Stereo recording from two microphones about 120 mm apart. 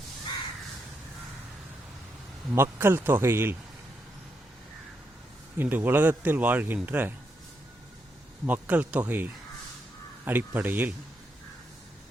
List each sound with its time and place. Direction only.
2.6 s speech: 20° right (ahead or behind)
5.5 s speech: 15° right (ahead or behind)
8.4 s speech: 15° right (ahead or behind)